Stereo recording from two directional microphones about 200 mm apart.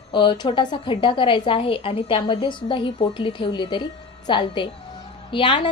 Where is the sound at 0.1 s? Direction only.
25° left (ahead or behind).